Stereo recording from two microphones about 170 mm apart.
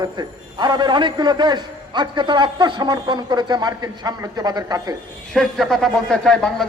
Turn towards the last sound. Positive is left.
turn(degrees=5)  # may be behind; listen again after turning